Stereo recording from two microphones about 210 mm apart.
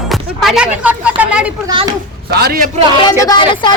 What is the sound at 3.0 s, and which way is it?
Speech, 20° left (ahead or behind).